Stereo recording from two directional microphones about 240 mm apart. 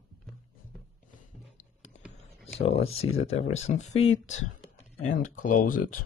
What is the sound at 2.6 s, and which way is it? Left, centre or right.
Speech, left.